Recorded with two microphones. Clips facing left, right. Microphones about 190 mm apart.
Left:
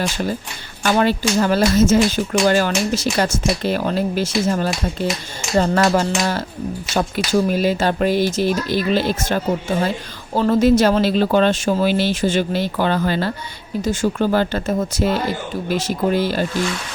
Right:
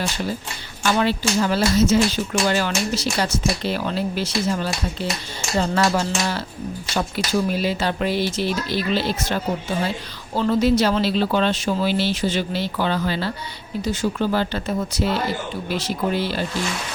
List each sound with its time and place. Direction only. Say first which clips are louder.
0.9 s speech: left 3 dB; 50° left (ahead or behind)